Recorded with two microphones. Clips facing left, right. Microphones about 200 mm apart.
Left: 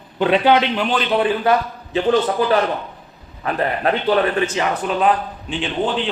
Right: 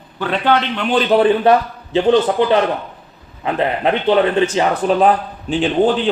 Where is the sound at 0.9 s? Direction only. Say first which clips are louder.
Right 8 dB; 30° right (ahead or behind).